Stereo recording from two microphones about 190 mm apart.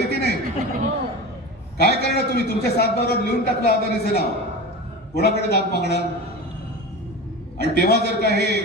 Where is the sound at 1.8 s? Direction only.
55° left (ahead or behind).